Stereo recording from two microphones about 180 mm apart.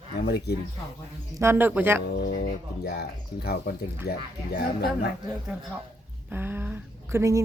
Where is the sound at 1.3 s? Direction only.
15° right (ahead or behind).